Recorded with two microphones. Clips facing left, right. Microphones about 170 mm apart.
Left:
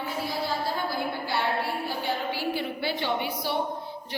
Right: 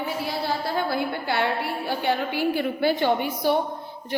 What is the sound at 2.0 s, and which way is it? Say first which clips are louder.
A woman's voice: right 8 dB; 55° right (ahead or behind).